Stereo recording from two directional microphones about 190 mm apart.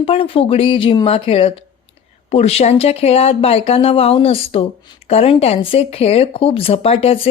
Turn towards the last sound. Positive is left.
turn(degrees=30)  # may be behind; listen again after turning